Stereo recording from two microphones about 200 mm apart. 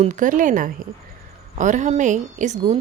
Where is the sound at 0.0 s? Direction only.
40° right (ahead or behind).